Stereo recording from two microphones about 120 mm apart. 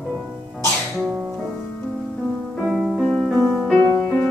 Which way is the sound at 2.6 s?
Centre (ahead or behind).